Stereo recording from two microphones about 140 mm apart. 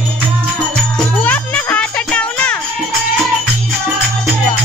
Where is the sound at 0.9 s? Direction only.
10° left (ahead or behind).